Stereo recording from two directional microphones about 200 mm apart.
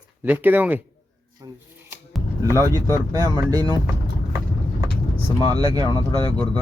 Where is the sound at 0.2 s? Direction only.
10° right (ahead or behind).